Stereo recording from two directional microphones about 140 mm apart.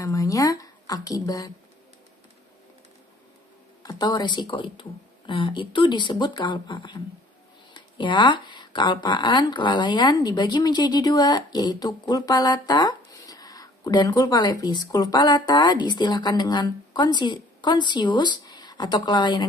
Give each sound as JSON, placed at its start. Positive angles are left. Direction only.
{"t": 0.0, "sound": "a woman's voice", "side_deg": 25}
{"t": 3.8, "sound": "speech", "side_deg": 30}